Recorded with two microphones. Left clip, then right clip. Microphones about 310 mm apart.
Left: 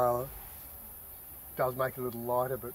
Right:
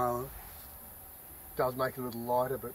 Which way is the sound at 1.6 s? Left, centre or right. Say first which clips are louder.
Even; centre.